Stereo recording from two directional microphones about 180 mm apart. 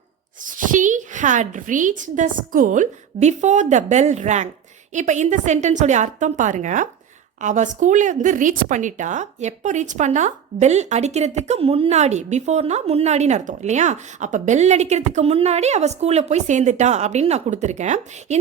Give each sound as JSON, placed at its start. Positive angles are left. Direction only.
{"t": 0.4, "sound": "a woman's voice", "side_deg": -45}